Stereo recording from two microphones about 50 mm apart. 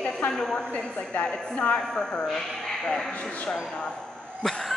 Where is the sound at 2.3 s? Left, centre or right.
Centre.